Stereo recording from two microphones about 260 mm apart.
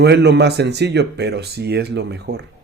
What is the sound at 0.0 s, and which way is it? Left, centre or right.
Speech, right.